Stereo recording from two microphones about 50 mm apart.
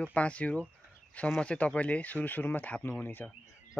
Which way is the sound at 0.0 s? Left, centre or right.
Left.